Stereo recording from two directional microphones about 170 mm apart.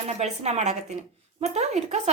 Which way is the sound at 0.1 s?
40° right (ahead or behind).